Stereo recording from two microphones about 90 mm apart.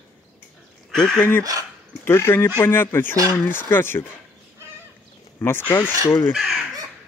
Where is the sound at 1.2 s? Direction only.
25° left (ahead or behind).